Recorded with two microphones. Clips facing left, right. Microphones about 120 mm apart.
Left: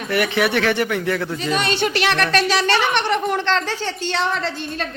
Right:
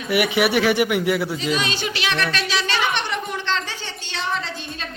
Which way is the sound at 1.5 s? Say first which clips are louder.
Left 5 dB; 55° left (ahead or behind).